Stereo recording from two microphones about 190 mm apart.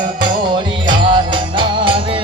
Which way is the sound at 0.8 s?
25° right (ahead or behind).